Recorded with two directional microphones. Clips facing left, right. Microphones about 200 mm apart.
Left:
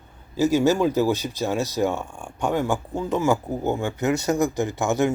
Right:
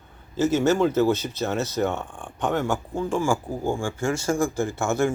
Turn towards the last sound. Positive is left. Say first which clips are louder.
# left 1 dB
turn(degrees=15)  # may be behind; listen again after turning